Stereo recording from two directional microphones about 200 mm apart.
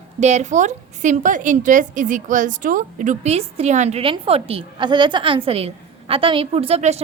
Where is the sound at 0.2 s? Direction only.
35° right (ahead or behind).